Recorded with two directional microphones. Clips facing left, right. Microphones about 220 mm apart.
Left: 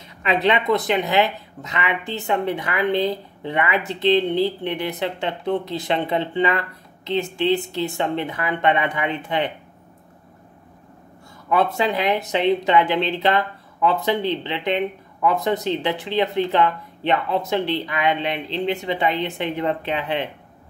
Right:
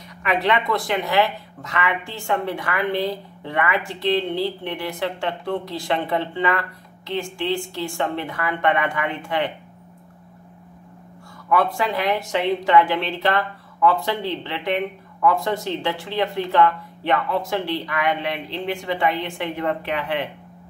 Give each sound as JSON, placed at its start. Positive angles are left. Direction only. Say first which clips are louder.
{"t": 0.2, "sound": "speech", "louder": "left 2 dB", "side_deg": 20}
{"t": 11.4, "sound": "speech", "louder": "left 1 dB", "side_deg": 20}